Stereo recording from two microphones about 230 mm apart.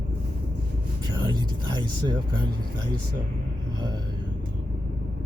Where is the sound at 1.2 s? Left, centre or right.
Centre.